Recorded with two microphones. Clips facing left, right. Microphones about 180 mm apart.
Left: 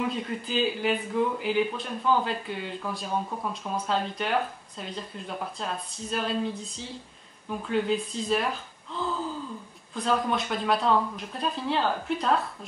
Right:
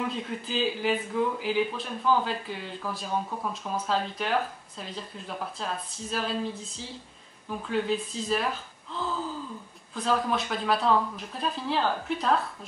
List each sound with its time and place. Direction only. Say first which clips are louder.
0.0 s speech: left 2 dB; centre (ahead or behind)